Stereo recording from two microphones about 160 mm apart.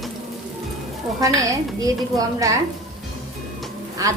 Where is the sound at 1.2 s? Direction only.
20° right (ahead or behind).